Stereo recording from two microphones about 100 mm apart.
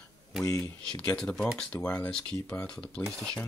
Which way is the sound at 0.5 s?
30° left (ahead or behind).